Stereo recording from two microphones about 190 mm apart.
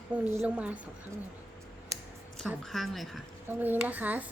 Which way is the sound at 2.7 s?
Centre (ahead or behind).